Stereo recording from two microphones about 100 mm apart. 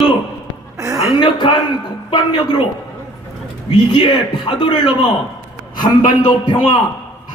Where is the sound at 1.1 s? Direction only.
50° left (ahead or behind).